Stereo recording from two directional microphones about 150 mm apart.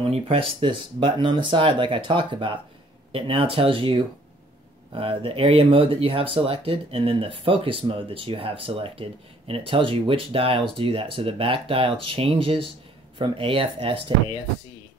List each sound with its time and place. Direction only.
0.0 s speech: 40° right (ahead or behind)